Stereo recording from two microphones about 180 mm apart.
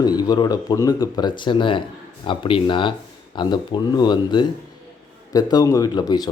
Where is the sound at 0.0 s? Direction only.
25° left (ahead or behind).